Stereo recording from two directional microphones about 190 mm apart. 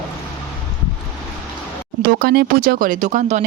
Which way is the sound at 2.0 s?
50° right (ahead or behind).